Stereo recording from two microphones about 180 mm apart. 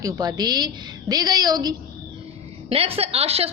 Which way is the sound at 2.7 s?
35° right (ahead or behind).